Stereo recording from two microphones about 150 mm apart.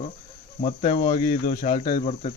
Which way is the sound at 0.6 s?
55° left (ahead or behind).